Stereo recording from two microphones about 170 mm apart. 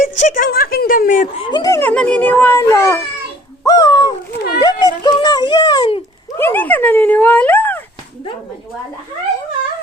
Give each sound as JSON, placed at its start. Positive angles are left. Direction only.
{"t": 0.0, "sound": "speech", "side_deg": 50}
{"t": 1.5, "sound": "a child's voice", "side_deg": 25}
{"t": 3.6, "sound": "bird", "side_deg": 20}
{"t": 4.6, "sound": "a sound", "side_deg": 25}
{"t": 6.4, "sound": "a child's voice", "side_deg": 10}